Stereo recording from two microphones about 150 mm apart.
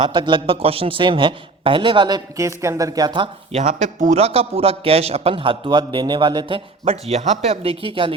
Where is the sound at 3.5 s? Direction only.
45° right (ahead or behind).